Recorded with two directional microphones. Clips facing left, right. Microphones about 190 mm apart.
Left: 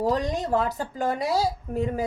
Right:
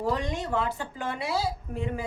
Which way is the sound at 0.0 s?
40° left (ahead or behind).